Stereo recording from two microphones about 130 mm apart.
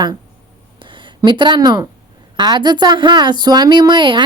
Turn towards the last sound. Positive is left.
turn(degrees=-35)  # may be behind; listen again after turning